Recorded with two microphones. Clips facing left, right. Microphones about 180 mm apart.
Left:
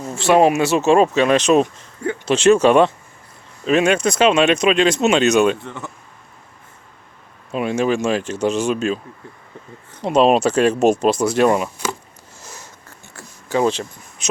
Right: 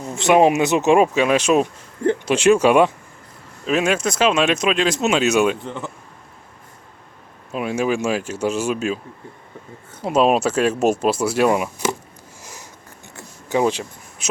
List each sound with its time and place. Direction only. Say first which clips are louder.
0.2 s speech: even; 20° right (ahead or behind)
7.5 s speech: left 2 dB; 5° right (ahead or behind)
12.4 s sniff: left 1 dB; 15° right (ahead or behind)
13.1 s a sound: left 1 dB; 15° right (ahead or behind)